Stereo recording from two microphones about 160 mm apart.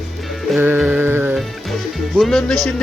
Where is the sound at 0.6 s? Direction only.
10° right (ahead or behind).